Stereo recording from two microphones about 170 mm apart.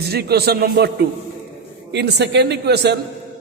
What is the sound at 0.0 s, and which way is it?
Speech, 70° right (ahead or behind).